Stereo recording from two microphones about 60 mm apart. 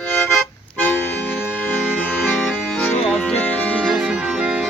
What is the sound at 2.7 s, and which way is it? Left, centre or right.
Music, left.